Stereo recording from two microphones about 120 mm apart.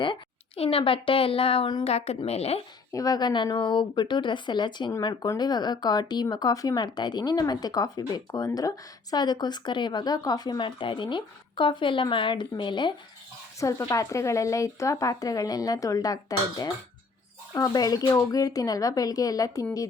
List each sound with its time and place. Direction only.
0.0 s a woman's voice: 50° left (ahead or behind)
2.9 s speech: 30° left (ahead or behind)
13.6 s speech: 25° left (ahead or behind)